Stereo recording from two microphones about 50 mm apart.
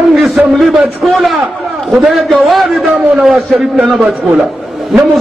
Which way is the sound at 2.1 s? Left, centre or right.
Centre.